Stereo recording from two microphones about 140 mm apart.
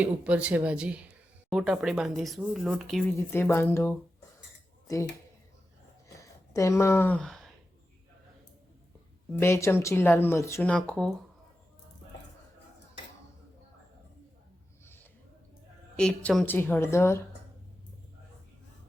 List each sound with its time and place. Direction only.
0.0 s speech: 10° right (ahead or behind)
3.2 s speech: 15° left (ahead or behind)
6.1 s a sound: 20° left (ahead or behind); by 7.5 s centre (ahead or behind)
9.3 s speech: 20° left (ahead or behind)
10.7 s speech: 5° left (ahead or behind)
16.0 s speech: 5° left (ahead or behind)